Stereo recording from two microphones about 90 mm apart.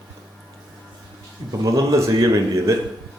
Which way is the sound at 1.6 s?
35° right (ahead or behind).